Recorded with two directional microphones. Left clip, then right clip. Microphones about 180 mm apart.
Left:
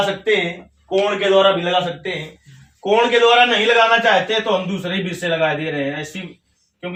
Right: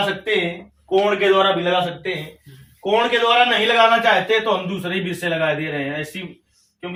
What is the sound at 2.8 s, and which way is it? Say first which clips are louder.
Speech: left 3 dB; 15° left (ahead or behind).